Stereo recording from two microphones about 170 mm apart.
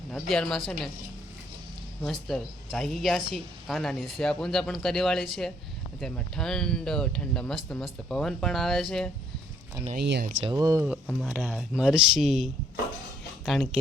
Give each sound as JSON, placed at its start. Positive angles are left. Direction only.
{"t": 0.1, "sound": "speech", "side_deg": 5}
{"t": 2.0, "sound": "speech", "side_deg": 0}
{"t": 10.0, "sound": "speech", "side_deg": -75}
{"t": 10.4, "sound": "speech", "side_deg": -20}
{"t": 11.0, "sound": "speech", "side_deg": -5}